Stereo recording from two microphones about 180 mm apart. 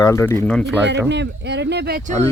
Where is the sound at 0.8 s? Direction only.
75° right (ahead or behind).